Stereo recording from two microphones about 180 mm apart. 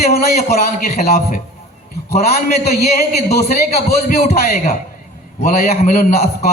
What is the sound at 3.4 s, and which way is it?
A man's voice, 60° left (ahead or behind).